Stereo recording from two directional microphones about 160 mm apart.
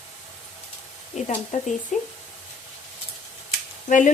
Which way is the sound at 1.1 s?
45° left (ahead or behind).